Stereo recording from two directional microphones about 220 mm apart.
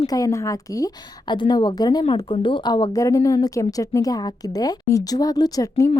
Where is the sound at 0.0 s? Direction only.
15° left (ahead or behind).